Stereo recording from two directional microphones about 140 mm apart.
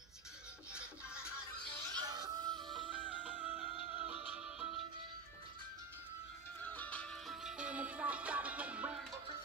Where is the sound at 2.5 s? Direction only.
Centre (ahead or behind).